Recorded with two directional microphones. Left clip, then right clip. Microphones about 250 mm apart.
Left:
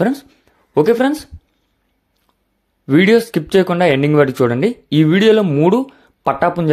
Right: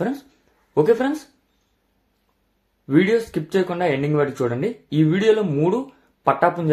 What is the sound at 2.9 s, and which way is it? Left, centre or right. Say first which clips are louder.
Speech: left 6 dB; left.